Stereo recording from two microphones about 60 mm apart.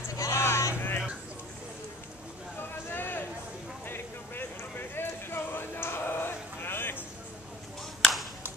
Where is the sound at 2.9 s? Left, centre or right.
Left.